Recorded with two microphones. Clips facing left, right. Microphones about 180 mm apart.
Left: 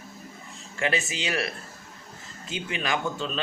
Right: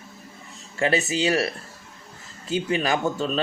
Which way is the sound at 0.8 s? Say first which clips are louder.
Right 6 dB; 35° right (ahead or behind).